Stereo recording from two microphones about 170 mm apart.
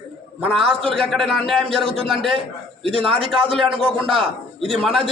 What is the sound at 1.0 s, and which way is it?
A man's voice, 5° left (ahead or behind).